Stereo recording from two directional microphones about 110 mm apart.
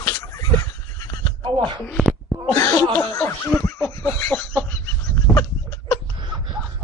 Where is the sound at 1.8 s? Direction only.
10° left (ahead or behind).